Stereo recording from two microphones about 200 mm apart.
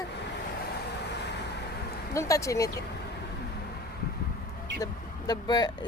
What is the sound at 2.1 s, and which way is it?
Speech, 15° left (ahead or behind).